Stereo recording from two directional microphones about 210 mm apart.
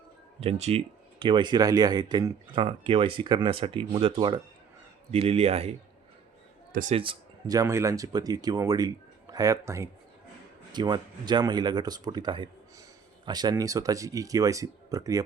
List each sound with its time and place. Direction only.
0.3 s speech: 30° right (ahead or behind)
6.7 s speech: 35° right (ahead or behind)
7.0 s speech: 20° right (ahead or behind)